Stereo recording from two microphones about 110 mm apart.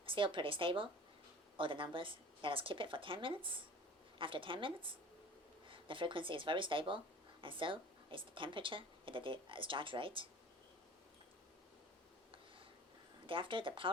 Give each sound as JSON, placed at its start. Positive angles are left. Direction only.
{"t": 0.0, "sound": "a woman's voice", "side_deg": -50}
{"t": 13.2, "sound": "a woman's voice", "side_deg": -50}